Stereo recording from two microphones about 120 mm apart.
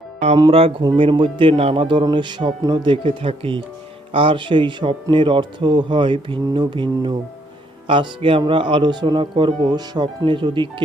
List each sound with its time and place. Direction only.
0.5 s speech: 55° right (ahead or behind)